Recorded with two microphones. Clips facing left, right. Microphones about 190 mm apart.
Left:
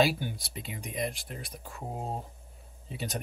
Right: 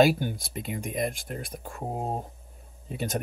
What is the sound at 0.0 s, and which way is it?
Speech, 50° right (ahead or behind).